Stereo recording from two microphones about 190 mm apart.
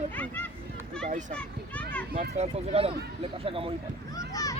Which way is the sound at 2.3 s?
35° right (ahead or behind).